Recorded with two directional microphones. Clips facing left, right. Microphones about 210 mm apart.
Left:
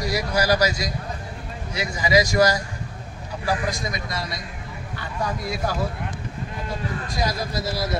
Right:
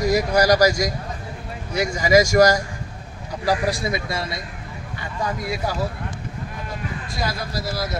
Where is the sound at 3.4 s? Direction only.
35° right (ahead or behind).